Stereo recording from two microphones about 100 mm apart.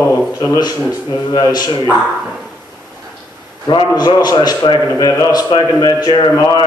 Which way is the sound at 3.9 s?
40° left (ahead or behind).